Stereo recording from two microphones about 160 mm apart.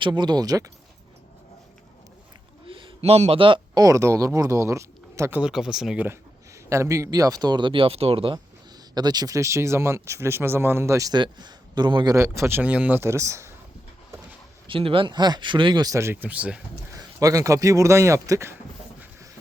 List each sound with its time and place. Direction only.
0.0 s speech: 25° right (ahead or behind)
2.6 s a sound: 35° right (ahead or behind)
3.8 s speech: 20° right (ahead or behind)
5.4 s speech: 5° right (ahead or behind); by 12.1 s 30° right (ahead or behind)
12.1 s speech: 20° right (ahead or behind)
14.7 s speech: 35° right (ahead or behind); by 16.6 s 10° right (ahead or behind)
16.9 s speech: 20° right (ahead or behind)